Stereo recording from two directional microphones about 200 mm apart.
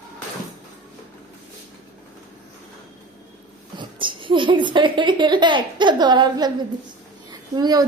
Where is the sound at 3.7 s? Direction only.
25° right (ahead or behind).